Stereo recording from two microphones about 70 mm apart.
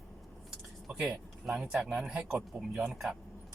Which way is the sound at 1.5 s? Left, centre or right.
Centre.